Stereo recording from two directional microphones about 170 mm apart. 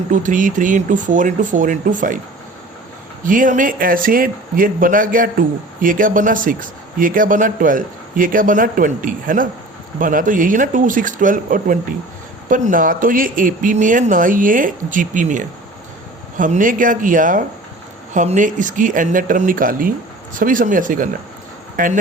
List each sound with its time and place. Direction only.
0.1 s speech: 50° right (ahead or behind)
3.2 s speech: 50° right (ahead or behind)